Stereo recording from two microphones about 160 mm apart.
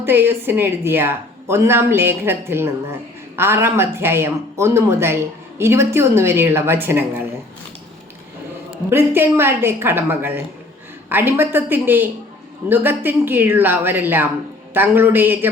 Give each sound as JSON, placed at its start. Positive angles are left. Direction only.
{"t": 0.0, "sound": "speech", "side_deg": -15}
{"t": 8.9, "sound": "speech", "side_deg": -15}